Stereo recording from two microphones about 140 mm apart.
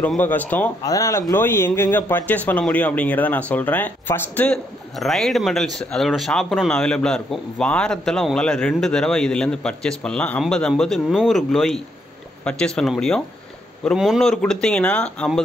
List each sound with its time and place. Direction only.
0.0 s speech: 10° left (ahead or behind)
4.9 s speech: centre (ahead or behind)